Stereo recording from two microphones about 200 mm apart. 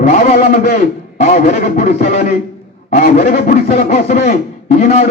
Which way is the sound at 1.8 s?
35° left (ahead or behind).